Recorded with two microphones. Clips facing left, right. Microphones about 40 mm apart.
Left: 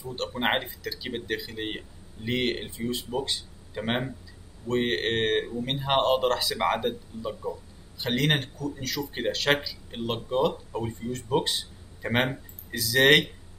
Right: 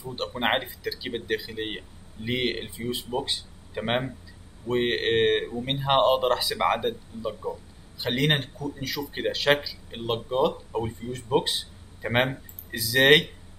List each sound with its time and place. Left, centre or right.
0.0 s a man's voice: centre